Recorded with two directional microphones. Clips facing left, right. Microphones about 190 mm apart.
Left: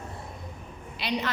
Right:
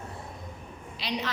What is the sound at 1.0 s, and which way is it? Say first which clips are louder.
Speech: left 3 dB; 60° left (ahead or behind).